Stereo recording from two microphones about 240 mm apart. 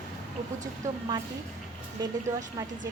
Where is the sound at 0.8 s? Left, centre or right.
Centre.